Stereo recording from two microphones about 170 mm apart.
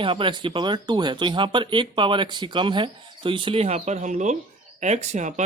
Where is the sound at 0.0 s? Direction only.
30° right (ahead or behind).